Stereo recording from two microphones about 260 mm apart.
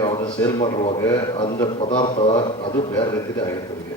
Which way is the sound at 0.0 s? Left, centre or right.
Centre.